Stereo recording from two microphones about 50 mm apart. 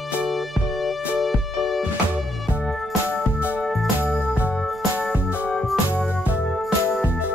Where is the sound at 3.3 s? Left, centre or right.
Right.